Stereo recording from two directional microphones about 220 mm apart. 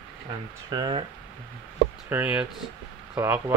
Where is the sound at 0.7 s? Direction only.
20° right (ahead or behind).